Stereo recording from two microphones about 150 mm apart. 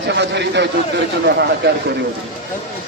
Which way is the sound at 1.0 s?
90° right.